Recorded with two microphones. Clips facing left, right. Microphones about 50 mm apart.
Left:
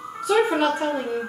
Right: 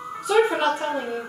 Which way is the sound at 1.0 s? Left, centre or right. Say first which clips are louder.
Left 2 dB; centre.